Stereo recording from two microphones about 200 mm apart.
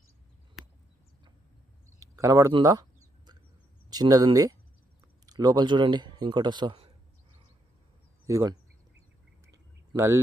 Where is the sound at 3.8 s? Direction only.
20° right (ahead or behind).